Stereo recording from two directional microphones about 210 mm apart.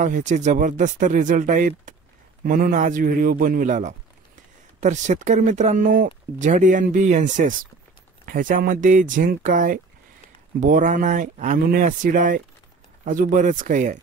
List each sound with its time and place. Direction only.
0.0 s speech: 35° right (ahead or behind)